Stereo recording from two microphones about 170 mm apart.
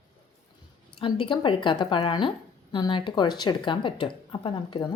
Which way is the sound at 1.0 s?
30° left (ahead or behind).